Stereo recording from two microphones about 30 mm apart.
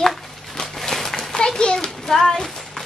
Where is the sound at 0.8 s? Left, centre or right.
Centre.